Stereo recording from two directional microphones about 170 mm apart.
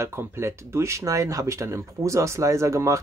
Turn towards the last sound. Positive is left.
turn(degrees=-15)  # may be behind; listen again after turning